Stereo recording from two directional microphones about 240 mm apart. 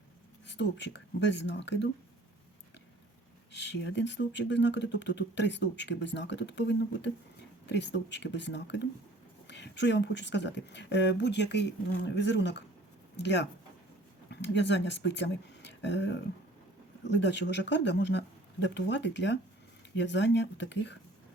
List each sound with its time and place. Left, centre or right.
0.4 s speech: left
3.5 s speech: left